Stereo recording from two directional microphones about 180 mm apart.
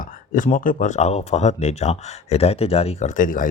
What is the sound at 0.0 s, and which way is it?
Speech, 45° left (ahead or behind).